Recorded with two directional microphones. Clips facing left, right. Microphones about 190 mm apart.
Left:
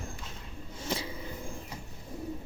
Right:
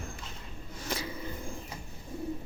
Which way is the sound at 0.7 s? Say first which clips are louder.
Left 1 dB; 25° left (ahead or behind).